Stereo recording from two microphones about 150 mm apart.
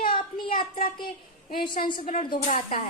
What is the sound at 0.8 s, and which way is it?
Speech, 75° left (ahead or behind).